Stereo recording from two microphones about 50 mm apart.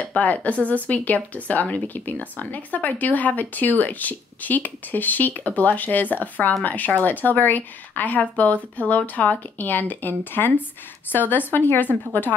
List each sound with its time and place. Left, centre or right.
0.1 s speech: left